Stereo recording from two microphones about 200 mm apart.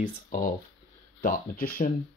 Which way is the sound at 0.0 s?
40° left (ahead or behind).